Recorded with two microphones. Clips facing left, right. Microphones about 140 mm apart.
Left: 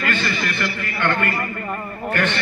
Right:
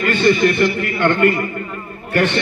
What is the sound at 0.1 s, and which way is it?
A man's voice, 30° right (ahead or behind).